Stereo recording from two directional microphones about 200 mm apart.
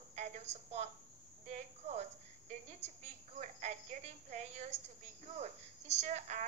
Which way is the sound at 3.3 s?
35° right (ahead or behind).